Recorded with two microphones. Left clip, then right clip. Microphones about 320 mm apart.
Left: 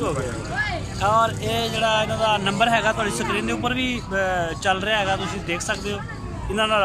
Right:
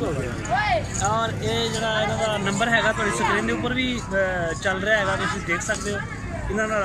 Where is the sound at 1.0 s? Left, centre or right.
Centre.